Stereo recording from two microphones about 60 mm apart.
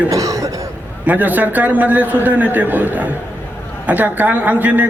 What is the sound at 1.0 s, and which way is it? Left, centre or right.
A man's voice, right.